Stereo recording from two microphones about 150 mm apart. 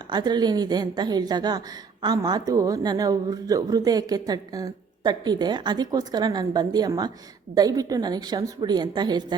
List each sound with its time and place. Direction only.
0.1 s a woman's voice: 30° right (ahead or behind)